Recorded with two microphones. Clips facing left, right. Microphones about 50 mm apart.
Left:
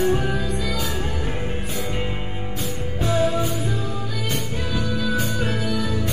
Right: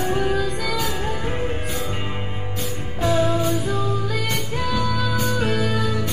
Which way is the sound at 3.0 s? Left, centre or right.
Right.